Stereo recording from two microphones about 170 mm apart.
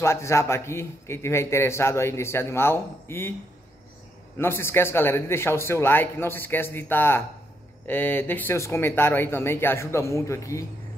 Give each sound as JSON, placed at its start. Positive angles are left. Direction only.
{"t": 0.0, "sound": "a man's voice", "side_deg": 15}
{"t": 4.4, "sound": "a man's voice", "side_deg": 15}